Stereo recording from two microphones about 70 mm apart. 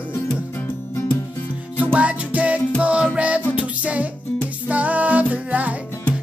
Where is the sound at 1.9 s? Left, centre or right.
Centre.